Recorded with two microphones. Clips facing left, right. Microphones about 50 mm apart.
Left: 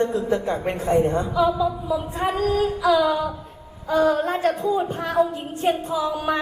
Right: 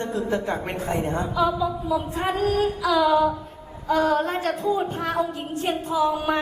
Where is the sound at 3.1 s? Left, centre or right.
Right.